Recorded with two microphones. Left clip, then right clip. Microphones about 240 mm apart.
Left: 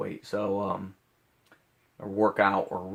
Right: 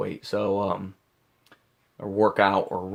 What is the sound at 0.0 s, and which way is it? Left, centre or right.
Speech, right.